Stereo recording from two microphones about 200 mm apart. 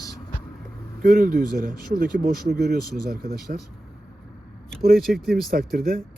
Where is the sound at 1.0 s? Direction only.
50° right (ahead or behind).